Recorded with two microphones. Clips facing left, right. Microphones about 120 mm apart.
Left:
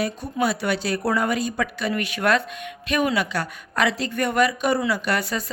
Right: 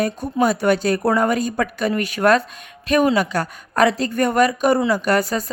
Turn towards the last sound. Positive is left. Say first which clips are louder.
# right 6 dB
turn(degrees=-40)  # may be behind; listen again after turning